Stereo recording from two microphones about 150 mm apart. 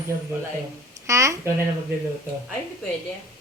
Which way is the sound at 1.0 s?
20° right (ahead or behind).